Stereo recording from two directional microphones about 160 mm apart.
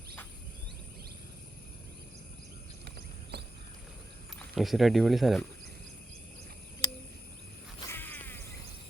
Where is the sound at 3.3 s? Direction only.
90° right.